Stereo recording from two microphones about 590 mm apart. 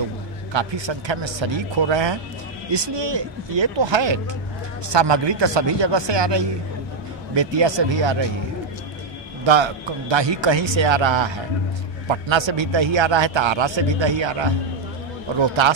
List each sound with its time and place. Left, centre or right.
0.5 s a man's voice: right
9.4 s a man's voice: right